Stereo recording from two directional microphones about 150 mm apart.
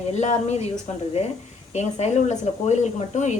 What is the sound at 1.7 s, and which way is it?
Speech, 50° left (ahead or behind).